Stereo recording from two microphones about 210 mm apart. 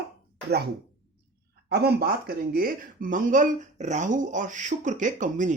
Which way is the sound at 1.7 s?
50° right (ahead or behind).